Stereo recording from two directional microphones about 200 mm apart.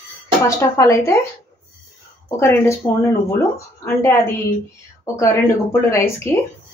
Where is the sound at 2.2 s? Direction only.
15° left (ahead or behind).